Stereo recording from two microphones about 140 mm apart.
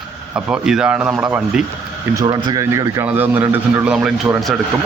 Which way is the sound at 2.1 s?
25° right (ahead or behind).